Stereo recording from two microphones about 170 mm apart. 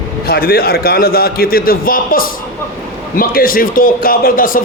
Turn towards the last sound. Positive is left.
turn(degrees=55)  # may be behind; listen again after turning